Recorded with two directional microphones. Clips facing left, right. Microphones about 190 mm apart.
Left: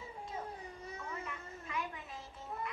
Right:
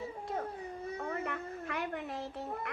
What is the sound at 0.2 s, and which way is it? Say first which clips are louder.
Baby cry: right 5 dB; 65° right (ahead or behind).